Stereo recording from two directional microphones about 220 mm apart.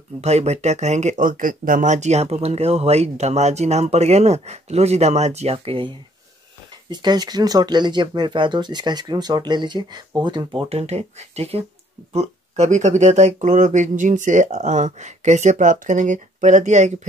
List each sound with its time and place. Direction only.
0.2 s speech: 30° right (ahead or behind)